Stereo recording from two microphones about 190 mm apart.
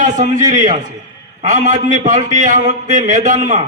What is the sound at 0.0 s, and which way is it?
A man's voice, 40° right (ahead or behind).